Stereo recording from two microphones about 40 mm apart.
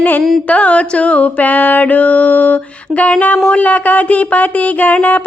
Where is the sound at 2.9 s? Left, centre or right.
Left.